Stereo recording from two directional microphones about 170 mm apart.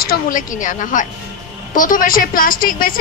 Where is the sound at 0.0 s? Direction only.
55° left (ahead or behind).